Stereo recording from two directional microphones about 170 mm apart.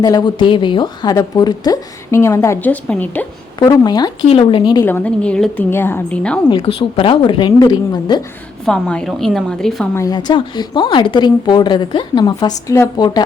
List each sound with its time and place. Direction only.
0.0 s speech: 25° left (ahead or behind)
3.6 s speech: 25° left (ahead or behind)
4.9 s a woman's voice: 10° left (ahead or behind)
6.5 s speech: 30° left (ahead or behind)
8.6 s a woman's voice: 5° left (ahead or behind)
9.9 s speech: 20° left (ahead or behind)